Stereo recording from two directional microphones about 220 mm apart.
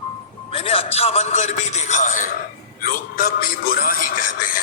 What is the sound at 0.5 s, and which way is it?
A man's voice, 25° left (ahead or behind).